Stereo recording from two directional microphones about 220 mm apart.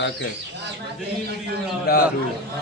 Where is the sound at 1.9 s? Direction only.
45° left (ahead or behind).